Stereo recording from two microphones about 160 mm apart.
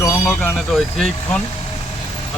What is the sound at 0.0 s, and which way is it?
Speech, 10° left (ahead or behind).